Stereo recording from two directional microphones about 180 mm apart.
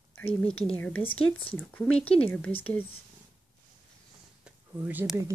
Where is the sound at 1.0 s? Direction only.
30° left (ahead or behind).